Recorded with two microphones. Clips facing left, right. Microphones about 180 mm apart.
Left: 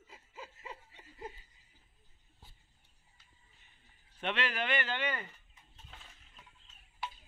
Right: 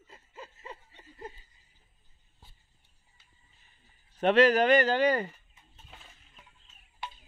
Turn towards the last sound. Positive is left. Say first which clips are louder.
# right 1 dB
turn(degrees=0)  # may be behind; listen again after turning